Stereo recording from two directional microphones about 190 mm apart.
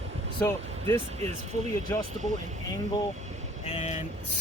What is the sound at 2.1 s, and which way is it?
Speech, 40° right (ahead or behind).